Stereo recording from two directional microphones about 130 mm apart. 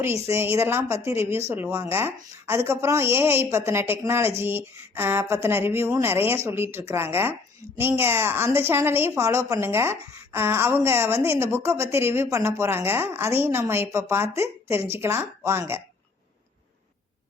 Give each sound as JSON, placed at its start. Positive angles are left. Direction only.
{"t": 0.0, "sound": "a woman's voice", "side_deg": -20}